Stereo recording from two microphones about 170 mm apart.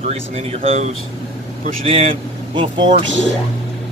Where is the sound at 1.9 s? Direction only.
35° right (ahead or behind).